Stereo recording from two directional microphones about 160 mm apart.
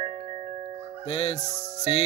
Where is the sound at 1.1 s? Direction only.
40° left (ahead or behind).